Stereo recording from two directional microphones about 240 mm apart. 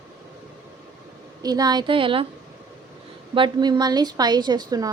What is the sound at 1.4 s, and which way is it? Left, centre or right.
Speech, centre.